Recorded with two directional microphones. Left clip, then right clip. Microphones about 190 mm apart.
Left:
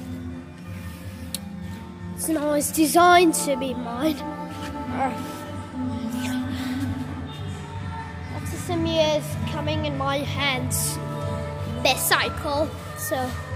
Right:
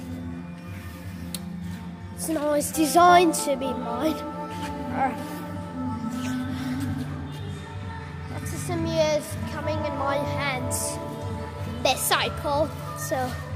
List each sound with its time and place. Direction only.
2.3 s a child's voice: 15° left (ahead or behind)
6.0 s music: 15° left (ahead or behind)
8.6 s a child's voice: 5° left (ahead or behind)
11.8 s speech: 5° left (ahead or behind)